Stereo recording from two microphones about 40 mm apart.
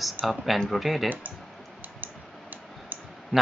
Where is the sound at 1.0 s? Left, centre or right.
Right.